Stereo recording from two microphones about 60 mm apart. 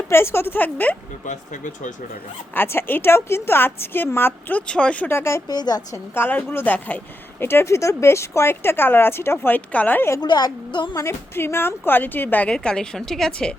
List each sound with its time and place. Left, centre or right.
0.1 s a woman's voice: left
2.6 s a woman's voice: left
4.5 s speech: centre
5.0 s speech: left
5.5 s a woman's voice: left
6.1 s a woman's voice: left
7.4 s speech: left
9.5 s speech: left
11.3 s a woman's voice: left
12.5 s a woman's voice: centre